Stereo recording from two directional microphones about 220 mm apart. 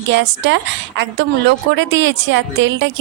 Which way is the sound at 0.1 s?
55° right (ahead or behind).